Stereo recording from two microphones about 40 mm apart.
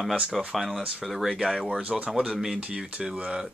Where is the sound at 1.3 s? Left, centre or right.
Centre.